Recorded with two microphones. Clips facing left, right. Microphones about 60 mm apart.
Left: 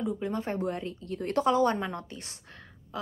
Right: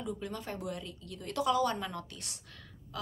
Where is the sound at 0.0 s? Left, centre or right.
Left.